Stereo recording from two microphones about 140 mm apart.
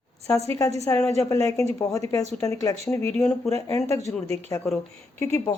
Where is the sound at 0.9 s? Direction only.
15° left (ahead or behind).